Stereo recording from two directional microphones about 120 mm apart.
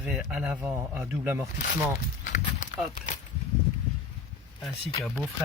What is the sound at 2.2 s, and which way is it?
Walk, 90° left.